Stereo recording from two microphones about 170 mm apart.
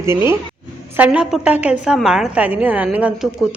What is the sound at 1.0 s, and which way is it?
A woman's voice, 5° right (ahead or behind).